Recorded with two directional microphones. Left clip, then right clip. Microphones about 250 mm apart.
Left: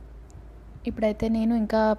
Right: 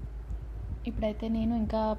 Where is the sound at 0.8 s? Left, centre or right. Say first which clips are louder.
Left 7 dB; left.